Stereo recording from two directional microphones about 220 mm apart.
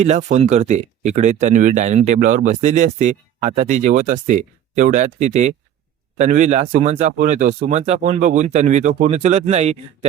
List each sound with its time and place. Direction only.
0.0 s speech: 30° right (ahead or behind)